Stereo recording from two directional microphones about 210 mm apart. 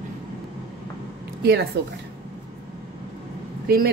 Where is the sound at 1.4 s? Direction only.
50° right (ahead or behind).